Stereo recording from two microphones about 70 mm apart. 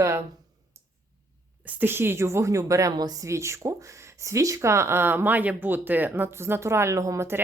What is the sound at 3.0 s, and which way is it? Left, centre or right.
Speech, right.